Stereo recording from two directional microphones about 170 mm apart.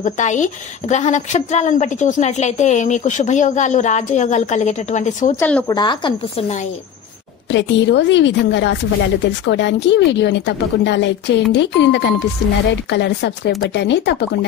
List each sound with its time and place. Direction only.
0.0 s a woman's voice: 45° left (ahead or behind)
5.4 s speech: 10° left (ahead or behind)
5.7 s a woman's voice: 25° left (ahead or behind)
7.5 s a woman's voice: 90° left